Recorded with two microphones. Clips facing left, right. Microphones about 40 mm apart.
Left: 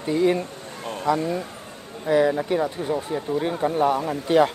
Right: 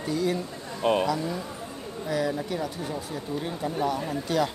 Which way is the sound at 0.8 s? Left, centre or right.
Right.